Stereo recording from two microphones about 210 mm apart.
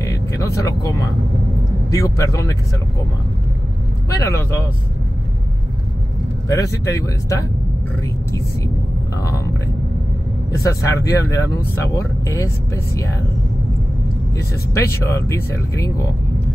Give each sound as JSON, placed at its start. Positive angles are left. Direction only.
{"t": 0.0, "sound": "vehicle", "side_deg": 15}
{"t": 1.9, "sound": "speech", "side_deg": 15}
{"t": 4.1, "sound": "speech", "side_deg": 15}
{"t": 6.5, "sound": "speech", "side_deg": 15}
{"t": 10.5, "sound": "speech", "side_deg": 15}
{"t": 14.7, "sound": "speech", "side_deg": 15}